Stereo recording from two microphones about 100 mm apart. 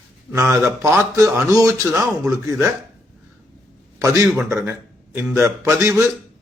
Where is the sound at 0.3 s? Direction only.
25° right (ahead or behind).